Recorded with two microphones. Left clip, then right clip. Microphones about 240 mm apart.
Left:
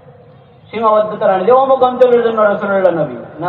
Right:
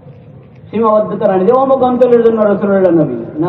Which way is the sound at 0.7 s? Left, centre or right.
Left.